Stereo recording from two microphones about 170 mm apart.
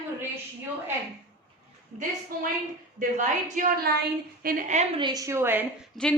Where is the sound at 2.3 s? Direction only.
60° right (ahead or behind).